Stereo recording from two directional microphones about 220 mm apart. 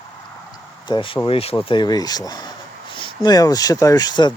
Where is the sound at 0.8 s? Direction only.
20° left (ahead or behind).